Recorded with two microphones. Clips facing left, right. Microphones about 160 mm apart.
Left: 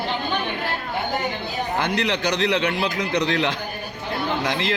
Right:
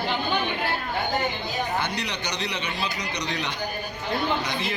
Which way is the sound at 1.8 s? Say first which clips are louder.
Left 7 dB; 90° left.